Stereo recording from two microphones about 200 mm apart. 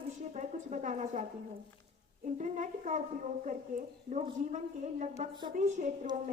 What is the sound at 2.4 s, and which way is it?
Speech, 40° right (ahead or behind).